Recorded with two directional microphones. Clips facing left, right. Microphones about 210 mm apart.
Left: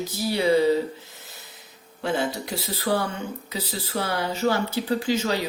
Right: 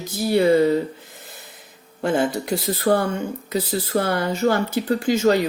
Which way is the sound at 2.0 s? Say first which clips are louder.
Right 5 dB; 50° right (ahead or behind).